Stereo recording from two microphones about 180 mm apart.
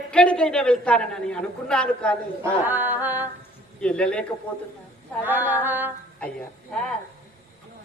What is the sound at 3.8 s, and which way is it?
Speech, 5° left (ahead or behind).